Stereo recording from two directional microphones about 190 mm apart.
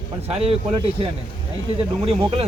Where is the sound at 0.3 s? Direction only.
30° right (ahead or behind).